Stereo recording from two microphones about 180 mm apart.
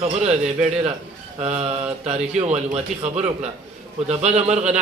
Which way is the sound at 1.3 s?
35° right (ahead or behind).